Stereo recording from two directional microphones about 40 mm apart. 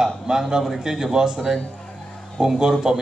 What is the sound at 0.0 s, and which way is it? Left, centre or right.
Speech, centre.